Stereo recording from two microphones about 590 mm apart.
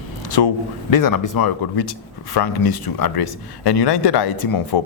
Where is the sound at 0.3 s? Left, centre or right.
Left.